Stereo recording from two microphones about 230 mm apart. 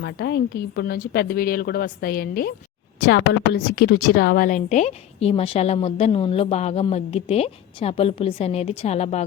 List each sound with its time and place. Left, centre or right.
0.0 s a woman's voice: left